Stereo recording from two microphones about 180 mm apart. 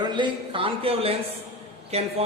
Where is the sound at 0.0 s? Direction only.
25° right (ahead or behind).